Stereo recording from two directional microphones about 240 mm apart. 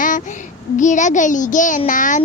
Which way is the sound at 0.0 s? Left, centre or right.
Left.